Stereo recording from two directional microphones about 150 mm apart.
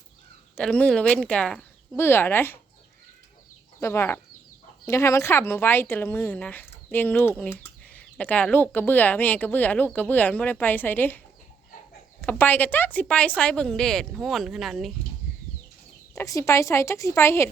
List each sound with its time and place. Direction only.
0.5 s speech: 5° left (ahead or behind)
2.0 s speech: 15° left (ahead or behind)
3.8 s speech: 15° left (ahead or behind)
12.2 s speech: 10° left (ahead or behind)
16.1 s a woman's voice: 20° left (ahead or behind)